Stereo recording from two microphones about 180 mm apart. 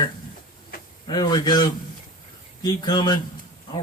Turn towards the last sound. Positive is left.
turn(degrees=25)  # may be behind; listen again after turning